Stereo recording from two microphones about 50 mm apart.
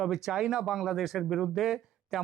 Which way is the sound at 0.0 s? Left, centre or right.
Centre.